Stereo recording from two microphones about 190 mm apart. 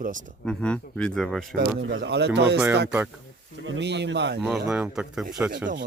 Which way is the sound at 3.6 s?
70° right (ahead or behind).